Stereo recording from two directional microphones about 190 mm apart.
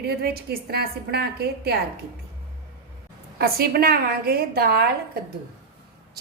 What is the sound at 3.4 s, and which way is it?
A woman's voice, 55° right (ahead or behind).